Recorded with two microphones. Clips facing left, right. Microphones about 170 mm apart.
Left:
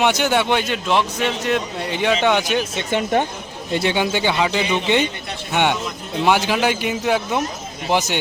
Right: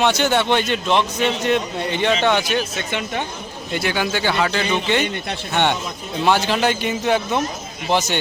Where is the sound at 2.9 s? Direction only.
45° left (ahead or behind).